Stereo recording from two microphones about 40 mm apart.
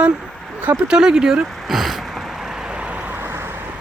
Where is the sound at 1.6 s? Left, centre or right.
Centre.